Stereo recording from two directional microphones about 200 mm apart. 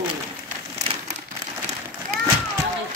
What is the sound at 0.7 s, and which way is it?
Crumpling, 35° right (ahead or behind).